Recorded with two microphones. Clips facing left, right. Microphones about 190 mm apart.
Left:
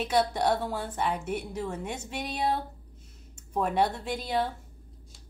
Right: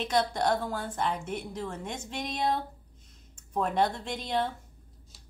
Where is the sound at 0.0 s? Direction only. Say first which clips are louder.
Left 2 dB; 5° left (ahead or behind).